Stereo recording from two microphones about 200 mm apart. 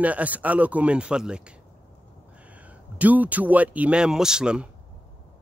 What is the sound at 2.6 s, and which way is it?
Speech, 10° right (ahead or behind).